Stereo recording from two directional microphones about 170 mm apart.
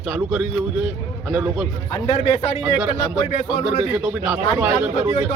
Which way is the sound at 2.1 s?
40° left (ahead or behind).